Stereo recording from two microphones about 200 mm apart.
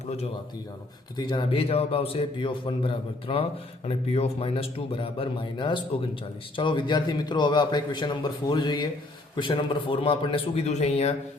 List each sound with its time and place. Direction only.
1.1 s a man's voice: 20° left (ahead or behind)